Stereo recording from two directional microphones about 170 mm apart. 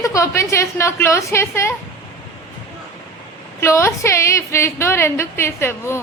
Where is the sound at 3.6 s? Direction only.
15° left (ahead or behind).